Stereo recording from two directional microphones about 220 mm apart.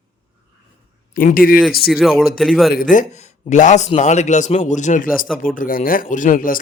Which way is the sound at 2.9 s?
35° left (ahead or behind).